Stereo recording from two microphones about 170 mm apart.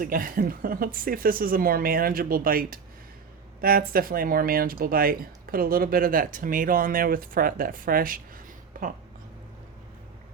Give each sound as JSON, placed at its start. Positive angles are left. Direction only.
{"t": 0.0, "sound": "speech", "side_deg": -55}